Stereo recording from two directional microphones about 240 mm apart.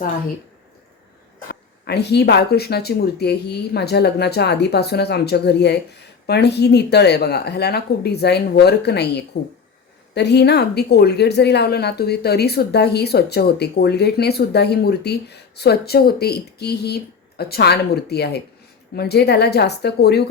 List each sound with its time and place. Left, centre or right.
1.8 s a woman's voice: left